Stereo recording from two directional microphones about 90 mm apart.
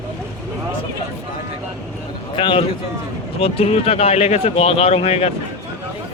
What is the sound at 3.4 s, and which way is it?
Speech, 90° left.